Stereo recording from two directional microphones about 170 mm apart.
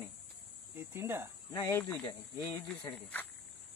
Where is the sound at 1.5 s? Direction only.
15° left (ahead or behind).